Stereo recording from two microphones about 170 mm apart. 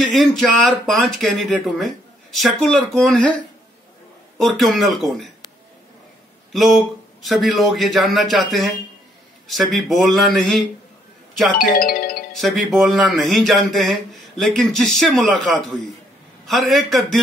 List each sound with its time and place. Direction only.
0.0 s speech: centre (ahead or behind)
4.4 s speech: centre (ahead or behind)
6.5 s speech: centre (ahead or behind)
11.5 s speech: 60° left (ahead or behind)
12.4 s speech: centre (ahead or behind)